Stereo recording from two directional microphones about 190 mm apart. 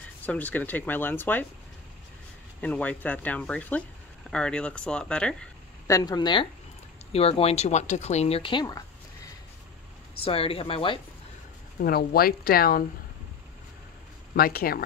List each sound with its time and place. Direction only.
0.2 s speech: 10° left (ahead or behind)
2.6 s speech: 10° left (ahead or behind)
5.9 s speech: 20° left (ahead or behind)
10.2 s speech: 30° left (ahead or behind)
11.8 s speech: 55° left (ahead or behind)
14.3 s speech: 50° left (ahead or behind)